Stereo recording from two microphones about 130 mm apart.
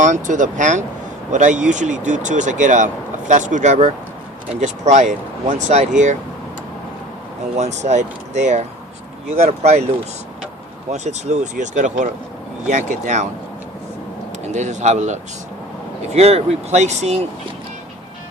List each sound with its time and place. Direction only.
0.0 s speech: 75° right (ahead or behind)
7.5 s speech: 60° right (ahead or behind)
10.9 s speech: 60° right (ahead or behind)
14.5 s speech: 65° right (ahead or behind)